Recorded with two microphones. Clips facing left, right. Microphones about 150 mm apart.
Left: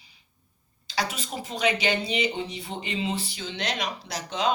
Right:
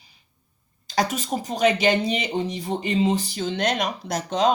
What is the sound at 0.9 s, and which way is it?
Speech, 45° right (ahead or behind).